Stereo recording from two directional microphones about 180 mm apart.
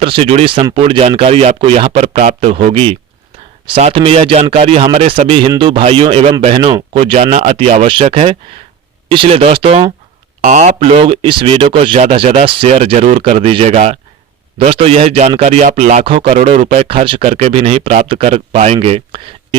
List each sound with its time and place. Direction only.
0.0 s speech: 30° right (ahead or behind)
10.4 s speech: 45° right (ahead or behind)